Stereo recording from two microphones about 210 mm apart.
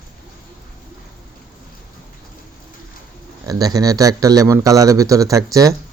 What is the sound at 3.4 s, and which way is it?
Speech, 15° right (ahead or behind).